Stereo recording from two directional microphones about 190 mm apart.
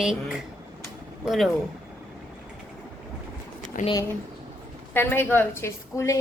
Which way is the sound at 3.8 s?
45° left (ahead or behind).